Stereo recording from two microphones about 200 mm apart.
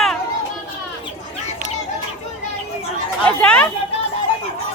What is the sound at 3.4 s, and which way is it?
Speech, 5° left (ahead or behind).